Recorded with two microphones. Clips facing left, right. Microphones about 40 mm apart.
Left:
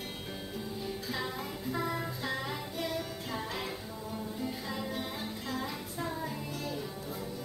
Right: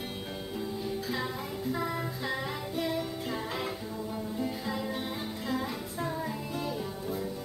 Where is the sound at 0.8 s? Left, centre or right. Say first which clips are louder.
Right 2 dB; centre.